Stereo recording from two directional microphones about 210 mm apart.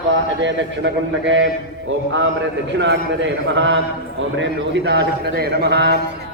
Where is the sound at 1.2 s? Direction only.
60° right (ahead or behind).